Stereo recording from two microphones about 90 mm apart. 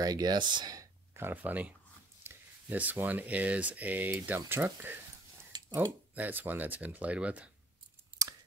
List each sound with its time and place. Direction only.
0.0 s speech: 50° right (ahead or behind)
1.1 s speech: 25° right (ahead or behind)
5.5 s a sound: 40° right (ahead or behind)
6.1 s speech: 20° right (ahead or behind)